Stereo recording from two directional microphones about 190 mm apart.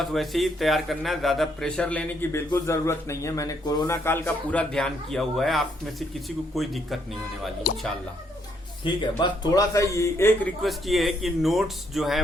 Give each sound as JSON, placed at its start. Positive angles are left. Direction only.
{"t": 0.0, "sound": "speech", "side_deg": 0}
{"t": 7.6, "sound": "speech", "side_deg": 50}
{"t": 8.8, "sound": "a man's voice", "side_deg": 25}
{"t": 10.6, "sound": "speech", "side_deg": 0}